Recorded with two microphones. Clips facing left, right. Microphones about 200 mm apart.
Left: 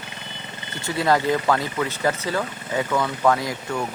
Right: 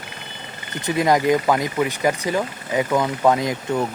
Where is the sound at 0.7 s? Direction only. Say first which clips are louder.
Right 3 dB; 15° right (ahead or behind).